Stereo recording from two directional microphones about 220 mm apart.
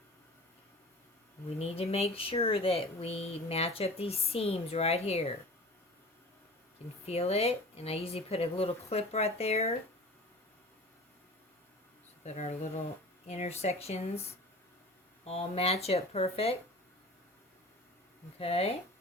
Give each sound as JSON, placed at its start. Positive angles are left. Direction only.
{"t": 1.5, "sound": "speech", "side_deg": 25}
{"t": 7.0, "sound": "speech", "side_deg": 25}
{"t": 12.2, "sound": "speech", "side_deg": 30}
{"t": 18.3, "sound": "speech", "side_deg": 25}